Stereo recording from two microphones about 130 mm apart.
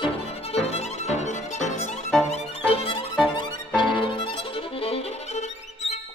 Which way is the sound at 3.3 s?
35° left (ahead or behind).